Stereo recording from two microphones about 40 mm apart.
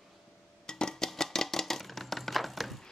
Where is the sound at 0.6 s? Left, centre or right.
Centre.